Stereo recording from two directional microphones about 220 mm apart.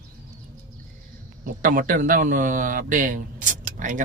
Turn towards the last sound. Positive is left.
turn(degrees=-35)  # may be behind; listen again after turning